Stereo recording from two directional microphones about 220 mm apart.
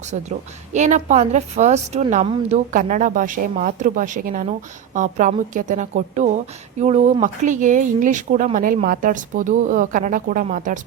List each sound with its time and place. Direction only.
0.1 s a woman's voice: 30° right (ahead or behind)